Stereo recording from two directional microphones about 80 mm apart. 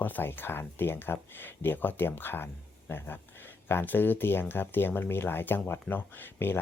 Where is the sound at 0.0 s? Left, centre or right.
Left.